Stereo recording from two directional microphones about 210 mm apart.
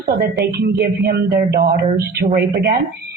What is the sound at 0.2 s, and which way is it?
A woman's voice, 45° right (ahead or behind).